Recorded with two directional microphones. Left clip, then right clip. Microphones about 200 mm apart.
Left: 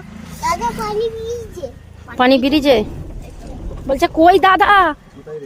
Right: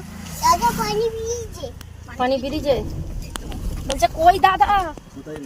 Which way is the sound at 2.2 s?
50° left (ahead or behind).